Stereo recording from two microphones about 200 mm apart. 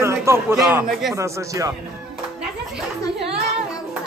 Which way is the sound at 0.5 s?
Centre (ahead or behind).